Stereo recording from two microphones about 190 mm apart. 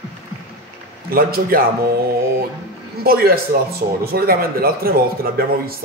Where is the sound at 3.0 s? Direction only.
55° right (ahead or behind).